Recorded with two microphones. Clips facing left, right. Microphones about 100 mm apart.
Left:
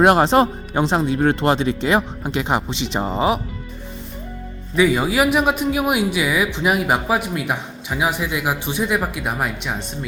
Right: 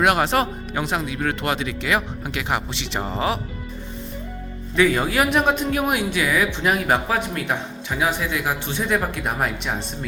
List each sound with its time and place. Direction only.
0.0 s speech: 30° left (ahead or behind)
4.8 s speech: 10° left (ahead or behind)